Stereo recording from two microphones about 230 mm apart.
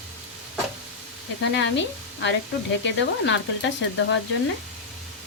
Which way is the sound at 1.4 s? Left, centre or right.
Left.